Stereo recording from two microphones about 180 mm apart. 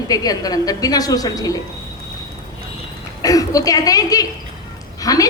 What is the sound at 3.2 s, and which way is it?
A woman's voice, 20° left (ahead or behind).